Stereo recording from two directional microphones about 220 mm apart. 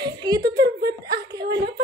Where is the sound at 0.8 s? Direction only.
45° right (ahead or behind).